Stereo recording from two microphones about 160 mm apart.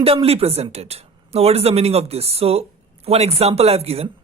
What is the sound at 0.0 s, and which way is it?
Speech, 35° right (ahead or behind).